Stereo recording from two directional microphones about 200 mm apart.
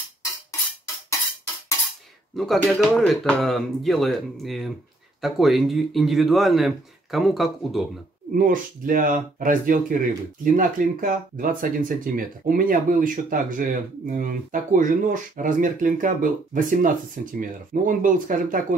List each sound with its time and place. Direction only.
2.3 s speech: centre (ahead or behind)
8.3 s speech: 45° right (ahead or behind)